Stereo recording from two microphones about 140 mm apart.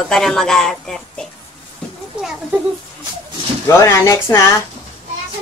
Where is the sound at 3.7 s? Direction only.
20° left (ahead or behind).